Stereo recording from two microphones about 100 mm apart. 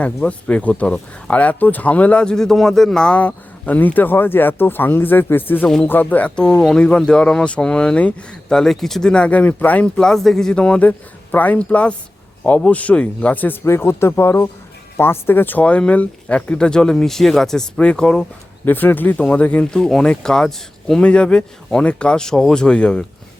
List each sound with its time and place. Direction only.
0.3 s speech: 15° left (ahead or behind)
5.6 s speech: 5° left (ahead or behind)
5.9 s speech: 15° left (ahead or behind)